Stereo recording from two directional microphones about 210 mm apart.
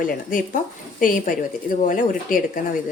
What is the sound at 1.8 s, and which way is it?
Speech, 40° left (ahead or behind).